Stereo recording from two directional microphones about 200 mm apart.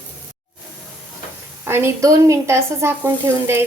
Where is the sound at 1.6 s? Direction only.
10° right (ahead or behind).